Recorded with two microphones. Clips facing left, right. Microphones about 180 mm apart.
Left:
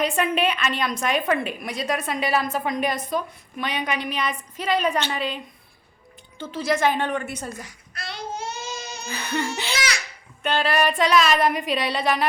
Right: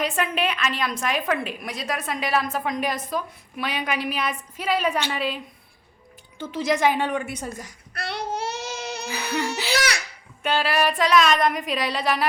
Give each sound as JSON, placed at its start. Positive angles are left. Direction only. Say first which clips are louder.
{"t": 0.0, "sound": "a woman's voice", "louder": "left 3 dB", "side_deg": 0}
{"t": 6.4, "sound": "a woman's voice", "louder": "right 1 dB", "side_deg": -15}
{"t": 7.9, "sound": "child singing", "louder": "right 4 dB", "side_deg": -65}
{"t": 9.0, "sound": "a sound", "louder": "left 1 dB", "side_deg": -5}
{"t": 9.7, "sound": "babbling", "louder": "right 6 dB", "side_deg": -60}
{"t": 10.4, "sound": "a woman's voice", "louder": "left 1 dB", "side_deg": -5}